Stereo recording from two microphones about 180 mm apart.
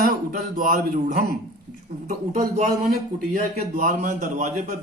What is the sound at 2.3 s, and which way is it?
A man's voice, 50° right (ahead or behind).